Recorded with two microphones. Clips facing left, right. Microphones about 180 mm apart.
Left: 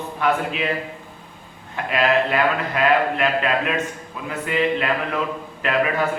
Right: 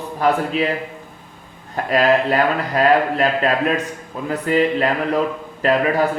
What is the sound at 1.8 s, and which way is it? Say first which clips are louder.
A man's voice: right 3 dB; 40° right (ahead or behind).